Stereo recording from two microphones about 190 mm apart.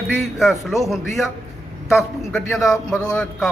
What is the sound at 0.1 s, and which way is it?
A man's voice, centre (ahead or behind).